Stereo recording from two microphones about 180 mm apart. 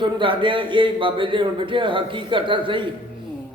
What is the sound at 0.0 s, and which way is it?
A man's voice, 25° right (ahead or behind).